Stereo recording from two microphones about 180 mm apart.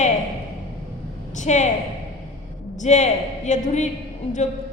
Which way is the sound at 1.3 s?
40° left (ahead or behind).